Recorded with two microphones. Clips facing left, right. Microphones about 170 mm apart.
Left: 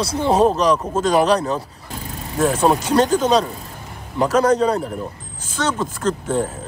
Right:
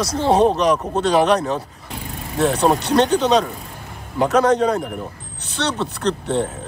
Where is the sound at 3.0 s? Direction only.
35° left (ahead or behind).